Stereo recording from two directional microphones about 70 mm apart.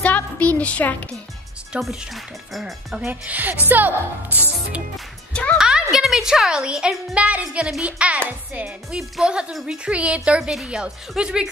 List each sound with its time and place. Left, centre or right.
0.0 s music: left
1.8 s a woman's voice: centre
3.1 s a woman's voice: right
5.3 s speech: centre
5.6 s a woman's voice: centre